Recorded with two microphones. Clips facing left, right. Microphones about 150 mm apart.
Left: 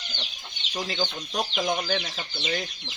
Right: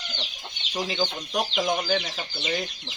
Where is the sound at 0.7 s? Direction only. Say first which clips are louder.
Right 2 dB; 5° right (ahead or behind).